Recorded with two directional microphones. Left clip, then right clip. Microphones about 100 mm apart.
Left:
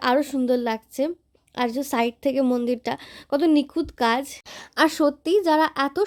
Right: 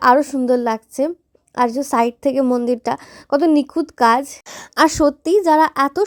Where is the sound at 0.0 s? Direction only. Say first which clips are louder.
Right 8 dB; 25° right (ahead or behind).